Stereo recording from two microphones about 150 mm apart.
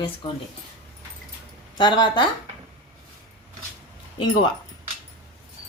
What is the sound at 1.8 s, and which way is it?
Speech, 30° left (ahead or behind).